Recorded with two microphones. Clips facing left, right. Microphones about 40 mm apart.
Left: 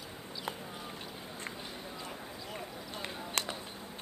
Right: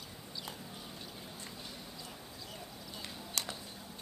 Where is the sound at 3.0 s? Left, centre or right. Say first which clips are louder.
Left 5 dB; left.